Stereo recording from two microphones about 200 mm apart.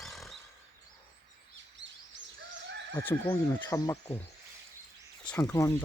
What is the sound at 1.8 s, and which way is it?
Bird, 65° right (ahead or behind).